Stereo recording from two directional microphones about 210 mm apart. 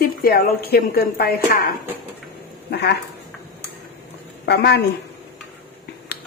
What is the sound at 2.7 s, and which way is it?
Speech, 50° left (ahead or behind).